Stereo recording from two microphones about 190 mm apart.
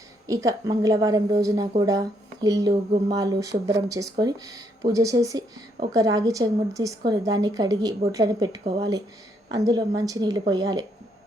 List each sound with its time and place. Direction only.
0.3 s a woman's voice: 20° right (ahead or behind)